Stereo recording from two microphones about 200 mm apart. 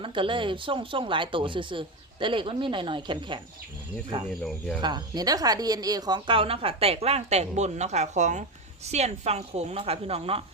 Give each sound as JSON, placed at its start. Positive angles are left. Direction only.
{"t": 0.0, "sound": "speech", "side_deg": -25}
{"t": 4.8, "sound": "a woman's voice", "side_deg": -20}